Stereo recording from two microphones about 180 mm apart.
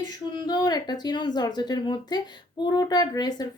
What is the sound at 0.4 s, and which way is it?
A woman's voice, 20° left (ahead or behind).